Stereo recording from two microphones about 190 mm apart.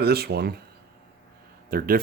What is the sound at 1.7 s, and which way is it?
Speech, 50° right (ahead or behind).